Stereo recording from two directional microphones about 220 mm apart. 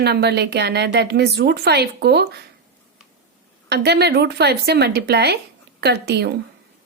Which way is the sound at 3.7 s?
50° right (ahead or behind).